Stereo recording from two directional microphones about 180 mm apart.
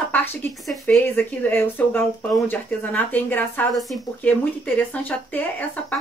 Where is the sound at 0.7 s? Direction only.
10° left (ahead or behind).